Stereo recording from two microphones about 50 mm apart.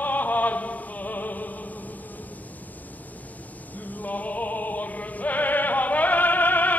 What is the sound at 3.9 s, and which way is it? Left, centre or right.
Music, left.